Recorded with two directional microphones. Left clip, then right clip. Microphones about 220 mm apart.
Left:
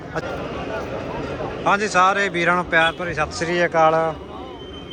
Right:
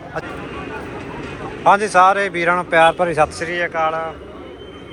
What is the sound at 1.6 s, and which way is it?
A man's voice, 5° left (ahead or behind).